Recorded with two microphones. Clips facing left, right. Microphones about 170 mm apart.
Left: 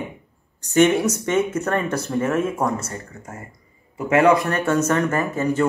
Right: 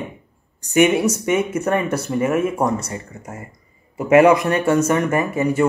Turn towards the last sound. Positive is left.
turn(degrees=-10)  # may be behind; listen again after turning